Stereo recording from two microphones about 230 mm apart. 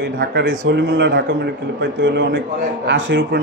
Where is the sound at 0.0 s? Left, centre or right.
Right.